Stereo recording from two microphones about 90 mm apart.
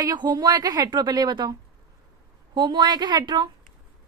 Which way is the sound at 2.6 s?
55° right (ahead or behind).